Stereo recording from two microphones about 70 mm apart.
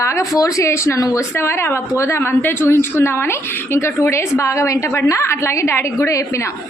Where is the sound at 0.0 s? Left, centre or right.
Left.